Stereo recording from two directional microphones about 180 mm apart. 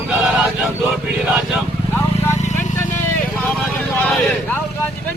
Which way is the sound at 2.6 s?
10° left (ahead or behind).